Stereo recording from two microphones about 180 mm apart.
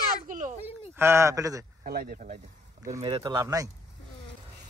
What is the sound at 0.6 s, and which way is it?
Speech, 15° right (ahead or behind).